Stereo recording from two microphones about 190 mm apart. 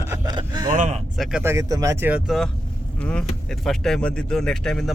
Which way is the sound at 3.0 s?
5° left (ahead or behind).